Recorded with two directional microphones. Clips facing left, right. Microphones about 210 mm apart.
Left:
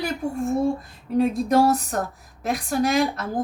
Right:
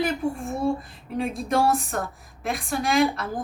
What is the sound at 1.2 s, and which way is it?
A woman's voice, 40° left (ahead or behind).